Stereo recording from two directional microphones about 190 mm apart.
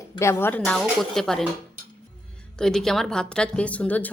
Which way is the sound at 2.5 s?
Centre (ahead or behind).